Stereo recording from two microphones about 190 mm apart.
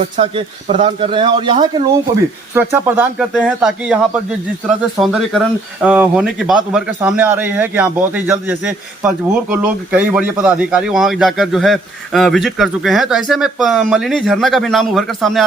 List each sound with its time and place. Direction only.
0.0 s speech: 35° right (ahead or behind)
2.6 s a man's voice: 10° right (ahead or behind)